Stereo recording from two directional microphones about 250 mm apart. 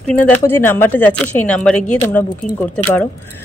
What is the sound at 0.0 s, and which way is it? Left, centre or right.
Speech, centre.